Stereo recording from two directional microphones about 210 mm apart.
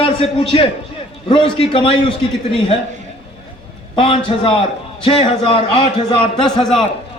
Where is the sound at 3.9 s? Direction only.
25° left (ahead or behind).